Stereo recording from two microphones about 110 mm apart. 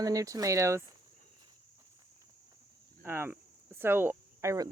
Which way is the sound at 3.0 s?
20° right (ahead or behind).